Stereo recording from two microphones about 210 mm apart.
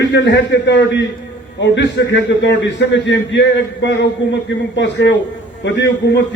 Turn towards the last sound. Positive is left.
turn(degrees=55)  # may be behind; listen again after turning